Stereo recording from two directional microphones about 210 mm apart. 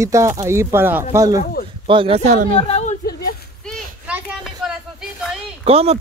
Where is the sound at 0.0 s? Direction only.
15° right (ahead or behind); by 2.5 s 35° right (ahead or behind).